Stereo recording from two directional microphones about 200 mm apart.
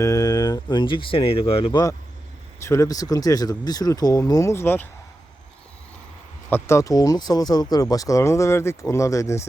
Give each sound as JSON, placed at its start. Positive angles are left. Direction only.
{"t": 0.0, "sound": "speech", "side_deg": 15}
{"t": 6.5, "sound": "speech", "side_deg": 15}